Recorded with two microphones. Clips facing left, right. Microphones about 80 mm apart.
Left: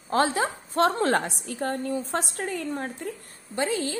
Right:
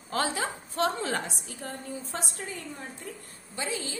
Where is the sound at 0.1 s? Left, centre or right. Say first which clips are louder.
Left 6 dB; left.